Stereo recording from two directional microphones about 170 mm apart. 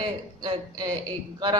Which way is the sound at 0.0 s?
30° right (ahead or behind).